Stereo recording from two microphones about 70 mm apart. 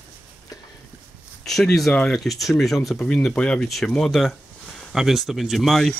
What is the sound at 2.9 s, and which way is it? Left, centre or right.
Speech, centre.